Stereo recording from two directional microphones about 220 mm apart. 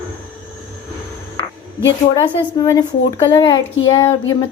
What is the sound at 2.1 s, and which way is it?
A woman's voice, 15° left (ahead or behind).